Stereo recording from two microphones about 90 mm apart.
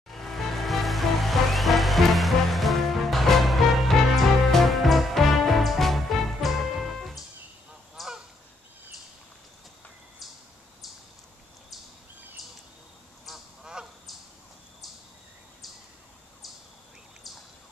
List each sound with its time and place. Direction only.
0.1 s music: centre (ahead or behind)
7.9 s goose: 5° right (ahead or behind)
12.4 s bird: centre (ahead or behind)
13.2 s duck: 5° right (ahead or behind)